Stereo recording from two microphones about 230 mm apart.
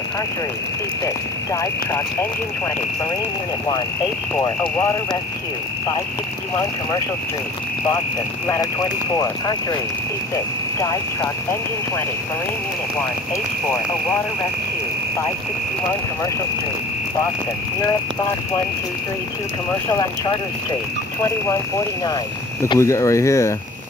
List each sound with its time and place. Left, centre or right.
1.0 s speech: centre
9.1 s speech: centre
10.8 s speech: centre
22.0 s speech: centre